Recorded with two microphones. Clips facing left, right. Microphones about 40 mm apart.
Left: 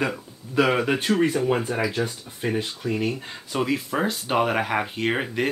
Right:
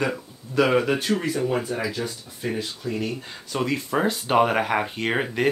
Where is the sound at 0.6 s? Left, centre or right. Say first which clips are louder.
Right 1 dB; centre.